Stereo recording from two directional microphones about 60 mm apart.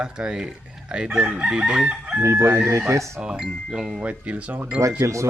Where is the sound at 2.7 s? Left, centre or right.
Right.